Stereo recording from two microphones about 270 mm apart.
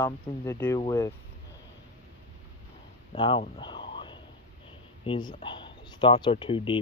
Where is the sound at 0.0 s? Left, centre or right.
Centre.